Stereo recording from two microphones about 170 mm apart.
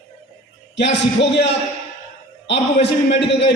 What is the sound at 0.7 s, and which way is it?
A man's voice, 90° left.